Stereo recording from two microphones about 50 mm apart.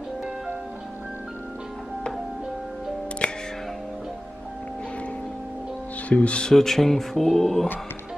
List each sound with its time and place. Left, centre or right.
3.2 s music: left
6.0 s speech: left
6.5 s speech: centre